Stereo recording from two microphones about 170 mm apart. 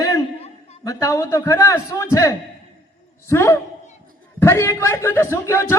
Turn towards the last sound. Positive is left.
turn(degrees=15)  # may be behind; listen again after turning